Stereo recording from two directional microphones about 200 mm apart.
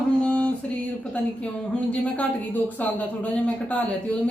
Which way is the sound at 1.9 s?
10° left (ahead or behind).